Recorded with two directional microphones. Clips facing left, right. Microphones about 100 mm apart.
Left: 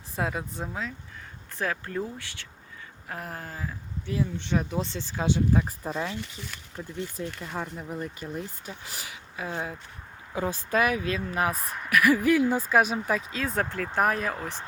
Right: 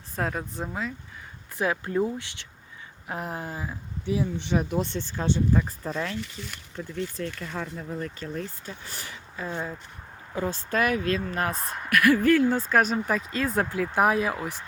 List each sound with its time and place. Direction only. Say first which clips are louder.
0.2 s speech: right 1 dB; 5° left (ahead or behind)
1.5 s speech: right 5 dB; 15° right (ahead or behind)
4.9 s speech: even; 5° left (ahead or behind)